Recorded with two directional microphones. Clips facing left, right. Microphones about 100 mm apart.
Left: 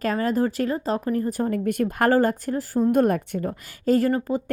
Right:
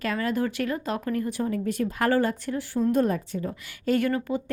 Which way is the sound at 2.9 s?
55° left (ahead or behind).